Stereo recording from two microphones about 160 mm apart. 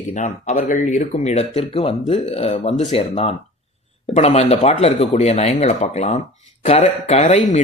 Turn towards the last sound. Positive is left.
turn(degrees=45)  # may be behind; listen again after turning